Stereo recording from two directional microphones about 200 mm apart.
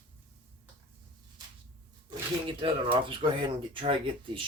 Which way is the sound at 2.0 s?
25° right (ahead or behind).